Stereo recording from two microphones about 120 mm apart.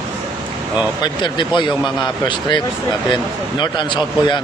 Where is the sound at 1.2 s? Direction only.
40° left (ahead or behind).